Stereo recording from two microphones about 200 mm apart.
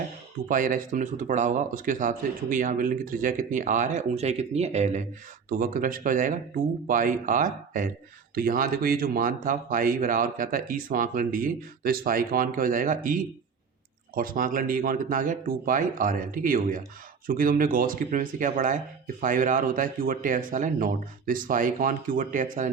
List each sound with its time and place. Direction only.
0.4 s speech: 40° right (ahead or behind)
5.5 s speech: 45° right (ahead or behind)